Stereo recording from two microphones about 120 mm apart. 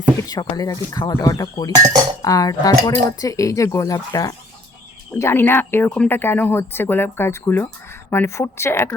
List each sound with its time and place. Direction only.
0.2 s speech: 30° left (ahead or behind)